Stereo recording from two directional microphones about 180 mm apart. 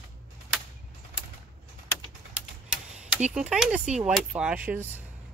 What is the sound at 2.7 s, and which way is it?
Speech, 5° right (ahead or behind).